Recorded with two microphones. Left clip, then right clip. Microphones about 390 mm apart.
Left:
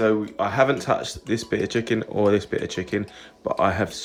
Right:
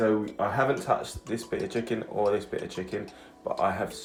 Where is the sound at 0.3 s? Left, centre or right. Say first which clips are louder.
Left 6 dB; centre.